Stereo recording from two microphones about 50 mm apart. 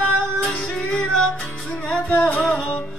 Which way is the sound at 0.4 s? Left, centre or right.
Centre.